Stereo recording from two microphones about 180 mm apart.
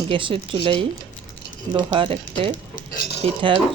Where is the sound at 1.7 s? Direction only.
30° right (ahead or behind).